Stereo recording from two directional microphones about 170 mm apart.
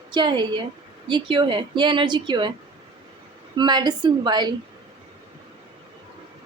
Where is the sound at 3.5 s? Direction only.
25° right (ahead or behind).